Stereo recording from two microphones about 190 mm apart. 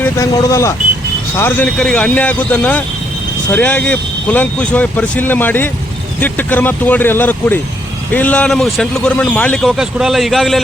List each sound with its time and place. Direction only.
0.0 s a man's voice: 15° left (ahead or behind); by 10.6 s centre (ahead or behind)